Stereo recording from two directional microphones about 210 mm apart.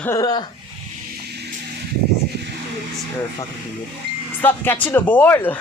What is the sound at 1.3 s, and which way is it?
Music, 50° right (ahead or behind).